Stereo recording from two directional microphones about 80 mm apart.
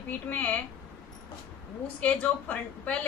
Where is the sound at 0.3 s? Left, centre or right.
Centre.